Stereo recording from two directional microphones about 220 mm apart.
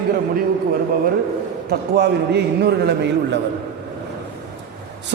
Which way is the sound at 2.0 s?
50° right (ahead or behind).